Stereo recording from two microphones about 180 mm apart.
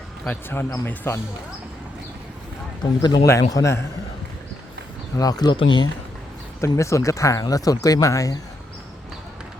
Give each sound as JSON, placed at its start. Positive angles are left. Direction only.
{"t": 0.3, "sound": "speech", "side_deg": 10}
{"t": 3.0, "sound": "speech", "side_deg": 20}
{"t": 5.1, "sound": "speech", "side_deg": 20}